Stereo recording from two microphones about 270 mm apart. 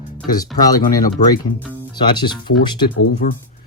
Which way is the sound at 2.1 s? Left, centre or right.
Centre.